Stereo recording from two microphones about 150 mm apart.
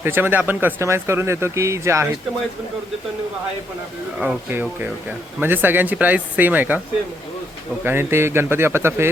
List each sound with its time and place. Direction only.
0.0 s speech: 15° right (ahead or behind)
4.2 s speech: 5° right (ahead or behind)
7.9 s speech: 15° right (ahead or behind)